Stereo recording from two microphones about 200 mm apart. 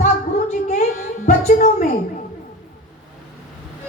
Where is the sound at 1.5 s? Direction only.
40° left (ahead or behind).